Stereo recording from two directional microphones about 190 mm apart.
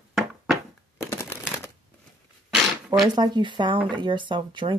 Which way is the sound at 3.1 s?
20° right (ahead or behind).